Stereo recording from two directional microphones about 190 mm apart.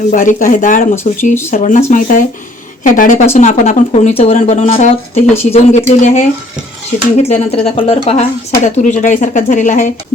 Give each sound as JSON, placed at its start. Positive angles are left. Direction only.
{"t": 0.1, "sound": "speech", "side_deg": 40}